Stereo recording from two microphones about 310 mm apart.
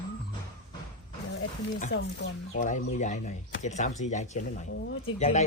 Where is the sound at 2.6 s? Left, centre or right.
Left.